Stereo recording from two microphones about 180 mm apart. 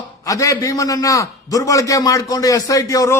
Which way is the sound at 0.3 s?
20° left (ahead or behind).